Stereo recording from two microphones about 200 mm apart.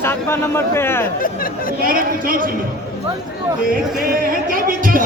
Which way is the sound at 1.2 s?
45° left (ahead or behind).